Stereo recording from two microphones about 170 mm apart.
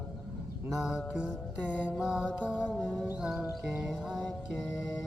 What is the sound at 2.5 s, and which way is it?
Music, 5° right (ahead or behind).